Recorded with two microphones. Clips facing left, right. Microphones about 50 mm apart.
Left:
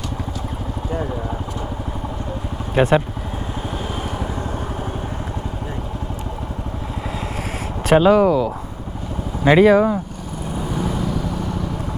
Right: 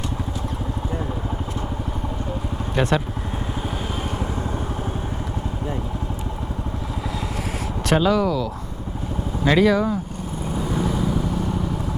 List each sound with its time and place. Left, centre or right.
2.8 s speech: left
7.9 s speech: left
8.1 s speech: left
9.4 s speech: left